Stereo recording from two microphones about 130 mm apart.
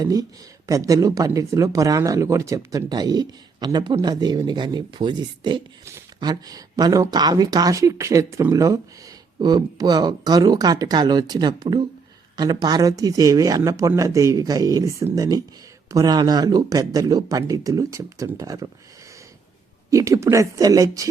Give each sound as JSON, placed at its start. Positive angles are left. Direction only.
{"t": 0.0, "sound": "speech", "side_deg": -30}
{"t": 19.9, "sound": "speech", "side_deg": -25}